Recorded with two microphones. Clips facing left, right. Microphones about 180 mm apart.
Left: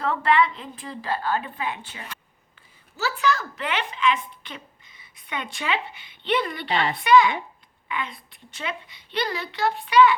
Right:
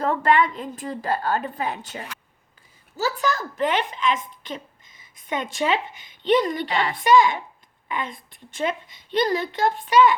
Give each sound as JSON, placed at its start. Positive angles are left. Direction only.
{"t": 0.0, "sound": "a woman's voice", "side_deg": -45}